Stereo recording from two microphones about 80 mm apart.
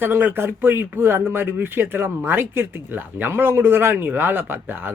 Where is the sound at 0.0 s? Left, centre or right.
Right.